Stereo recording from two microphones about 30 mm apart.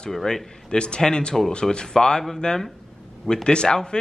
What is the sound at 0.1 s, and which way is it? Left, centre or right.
Speech, centre.